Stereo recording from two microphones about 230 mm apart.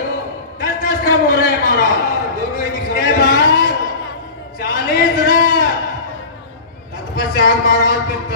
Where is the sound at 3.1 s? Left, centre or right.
Left.